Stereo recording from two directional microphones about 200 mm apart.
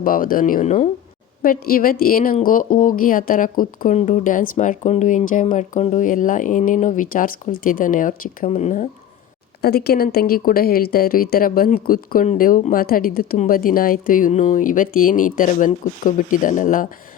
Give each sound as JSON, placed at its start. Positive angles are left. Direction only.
{"t": 0.0, "sound": "a woman's voice", "side_deg": 45}
{"t": 1.4, "sound": "a woman's voice", "side_deg": 45}
{"t": 9.6, "sound": "a woman's voice", "side_deg": 50}